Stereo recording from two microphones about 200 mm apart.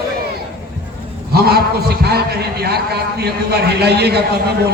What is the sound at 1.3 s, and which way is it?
A man's voice, 50° right (ahead or behind).